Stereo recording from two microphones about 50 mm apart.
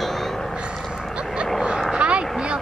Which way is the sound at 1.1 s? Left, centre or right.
Centre.